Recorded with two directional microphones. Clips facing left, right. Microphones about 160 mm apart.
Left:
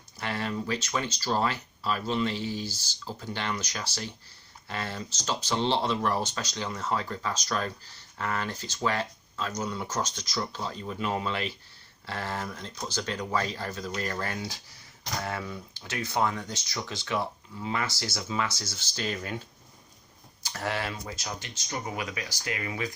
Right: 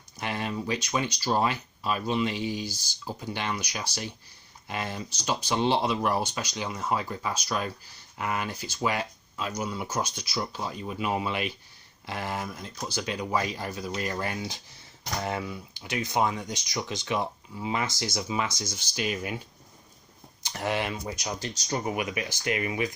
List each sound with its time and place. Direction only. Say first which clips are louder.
0.2 s speech: even; 15° right (ahead or behind)
21.3 s speech: right 6 dB; 35° right (ahead or behind)
21.8 s speech: right 5 dB; 20° right (ahead or behind)